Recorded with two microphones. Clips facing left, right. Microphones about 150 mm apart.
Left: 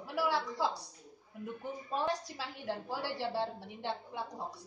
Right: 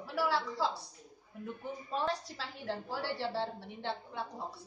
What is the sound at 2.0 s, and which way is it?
A woman's voice, 15° left (ahead or behind).